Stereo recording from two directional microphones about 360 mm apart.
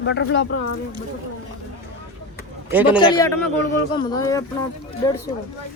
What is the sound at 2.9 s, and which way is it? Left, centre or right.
Speech, centre.